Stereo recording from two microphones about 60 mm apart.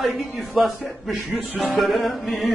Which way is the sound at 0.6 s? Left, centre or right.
Centre.